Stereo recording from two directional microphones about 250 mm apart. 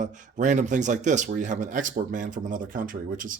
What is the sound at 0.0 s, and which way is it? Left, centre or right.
Speech, right.